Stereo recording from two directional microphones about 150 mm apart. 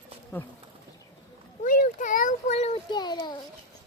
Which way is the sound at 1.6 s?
65° left (ahead or behind).